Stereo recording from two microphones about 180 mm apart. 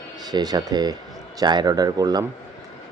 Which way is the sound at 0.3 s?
20° right (ahead or behind).